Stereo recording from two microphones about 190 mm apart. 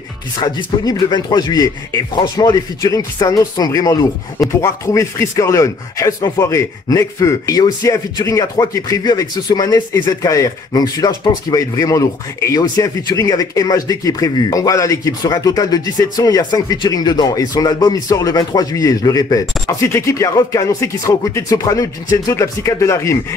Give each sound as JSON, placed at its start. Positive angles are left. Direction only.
{"t": 0.4, "sound": "speech", "side_deg": 20}